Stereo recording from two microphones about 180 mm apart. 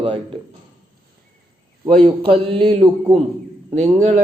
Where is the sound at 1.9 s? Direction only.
30° right (ahead or behind).